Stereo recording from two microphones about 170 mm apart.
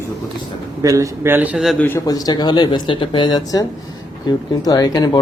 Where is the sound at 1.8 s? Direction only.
20° left (ahead or behind).